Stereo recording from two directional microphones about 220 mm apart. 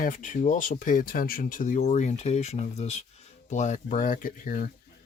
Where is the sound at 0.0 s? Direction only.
35° left (ahead or behind).